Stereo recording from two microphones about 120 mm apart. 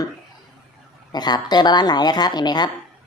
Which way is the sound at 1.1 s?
35° left (ahead or behind).